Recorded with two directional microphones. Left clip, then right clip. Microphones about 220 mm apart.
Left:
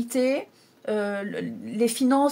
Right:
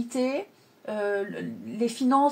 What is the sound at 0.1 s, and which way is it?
Speech, 50° left (ahead or behind).